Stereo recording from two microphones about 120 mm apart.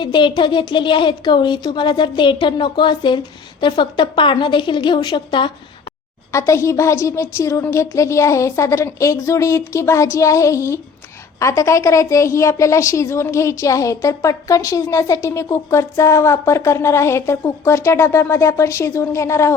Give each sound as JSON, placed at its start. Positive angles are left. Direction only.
{"t": 0.0, "sound": "speech", "side_deg": 40}
{"t": 6.3, "sound": "a woman's voice", "side_deg": 25}